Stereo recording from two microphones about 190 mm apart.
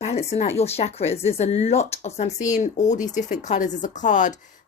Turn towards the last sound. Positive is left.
turn(degrees=40)  # may be behind; listen again after turning